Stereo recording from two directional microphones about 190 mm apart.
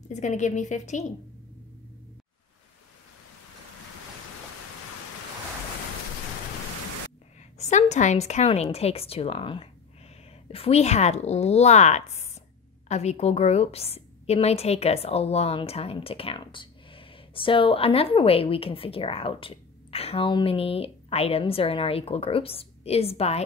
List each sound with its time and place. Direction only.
0.1 s a woman's voice: 40° left (ahead or behind)
7.5 s a woman's voice: 35° left (ahead or behind)